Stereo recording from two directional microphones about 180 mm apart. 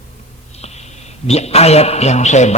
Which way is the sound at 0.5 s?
35° left (ahead or behind).